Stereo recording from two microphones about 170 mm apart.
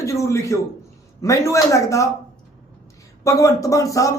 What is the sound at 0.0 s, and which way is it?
A man's voice, 15° left (ahead or behind).